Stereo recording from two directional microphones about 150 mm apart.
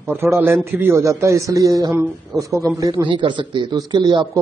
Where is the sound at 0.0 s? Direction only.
15° right (ahead or behind).